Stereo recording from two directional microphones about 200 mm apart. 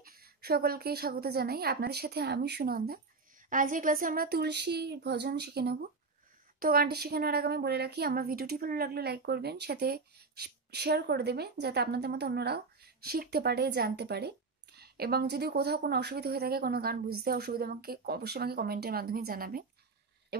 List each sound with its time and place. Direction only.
0.0 s a woman's voice: 50° right (ahead or behind)